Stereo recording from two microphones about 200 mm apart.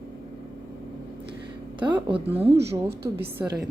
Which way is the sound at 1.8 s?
25° right (ahead or behind).